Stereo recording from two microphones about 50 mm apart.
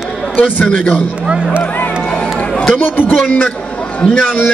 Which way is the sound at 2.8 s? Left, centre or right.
Left.